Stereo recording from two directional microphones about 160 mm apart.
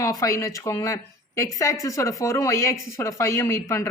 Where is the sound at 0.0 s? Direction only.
20° left (ahead or behind).